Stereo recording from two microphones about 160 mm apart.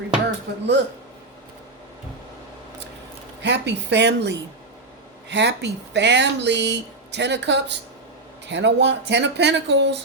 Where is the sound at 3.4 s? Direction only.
90° right.